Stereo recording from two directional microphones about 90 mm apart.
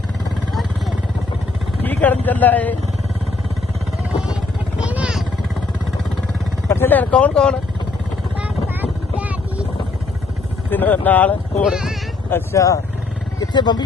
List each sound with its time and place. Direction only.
1.8 s speech: 20° left (ahead or behind)
4.8 s vehicle: 10° right (ahead or behind)
6.7 s speech: 25° left (ahead or behind)
8.4 s vehicle: 15° right (ahead or behind)
10.7 s speech: 20° left (ahead or behind)
11.6 s speech: 10° right (ahead or behind)
12.5 s speech: 40° left (ahead or behind)
13.4 s speech: 50° left (ahead or behind)